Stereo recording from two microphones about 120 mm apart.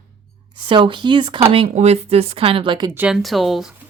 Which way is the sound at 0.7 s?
40° right (ahead or behind).